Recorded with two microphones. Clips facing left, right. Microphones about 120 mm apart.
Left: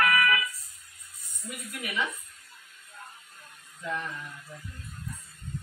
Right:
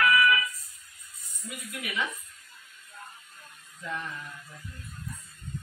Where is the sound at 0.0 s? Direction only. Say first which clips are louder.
Right 2 dB; 50° left (ahead or behind).